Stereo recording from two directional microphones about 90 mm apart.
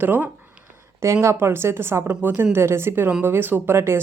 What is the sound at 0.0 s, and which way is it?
Speech, 20° right (ahead or behind).